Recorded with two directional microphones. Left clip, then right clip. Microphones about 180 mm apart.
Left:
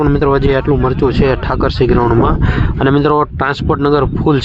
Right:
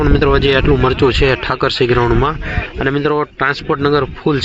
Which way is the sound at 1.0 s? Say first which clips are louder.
Even; 20° left (ahead or behind).